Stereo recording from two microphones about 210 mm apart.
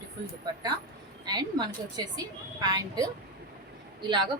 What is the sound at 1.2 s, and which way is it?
A woman's voice, 20° right (ahead or behind).